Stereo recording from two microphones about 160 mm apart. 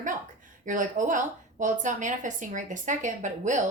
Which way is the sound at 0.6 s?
55° right (ahead or behind).